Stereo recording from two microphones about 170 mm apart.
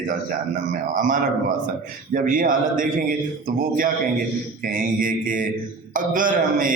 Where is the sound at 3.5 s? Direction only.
55° right (ahead or behind).